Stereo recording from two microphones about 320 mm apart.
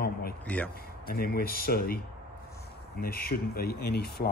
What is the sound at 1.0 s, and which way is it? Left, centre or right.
Speech, left.